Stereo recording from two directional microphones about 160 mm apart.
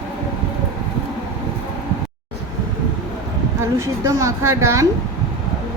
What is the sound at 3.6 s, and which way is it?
A woman's voice, 15° right (ahead or behind).